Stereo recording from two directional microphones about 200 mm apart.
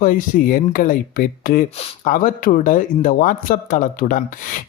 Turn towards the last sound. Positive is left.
turn(degrees=45)  # may be behind; listen again after turning